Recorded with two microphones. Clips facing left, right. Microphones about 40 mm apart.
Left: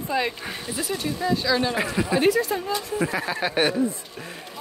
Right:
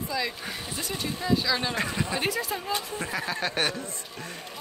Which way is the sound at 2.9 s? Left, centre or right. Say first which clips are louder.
Left 5 dB; centre.